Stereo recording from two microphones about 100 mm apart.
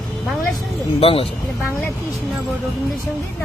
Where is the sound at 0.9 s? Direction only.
70° left (ahead or behind).